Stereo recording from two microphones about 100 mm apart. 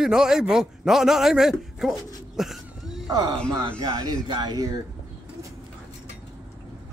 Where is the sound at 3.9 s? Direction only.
45° right (ahead or behind).